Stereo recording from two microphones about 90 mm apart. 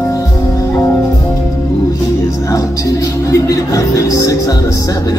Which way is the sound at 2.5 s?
40° left (ahead or behind).